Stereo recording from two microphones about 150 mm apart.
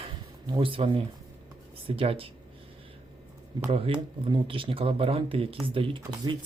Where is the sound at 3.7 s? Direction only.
35° right (ahead or behind).